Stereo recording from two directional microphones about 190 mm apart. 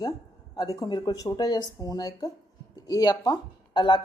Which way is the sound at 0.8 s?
20° left (ahead or behind).